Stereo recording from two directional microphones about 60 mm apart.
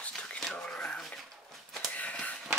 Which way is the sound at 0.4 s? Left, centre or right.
Centre.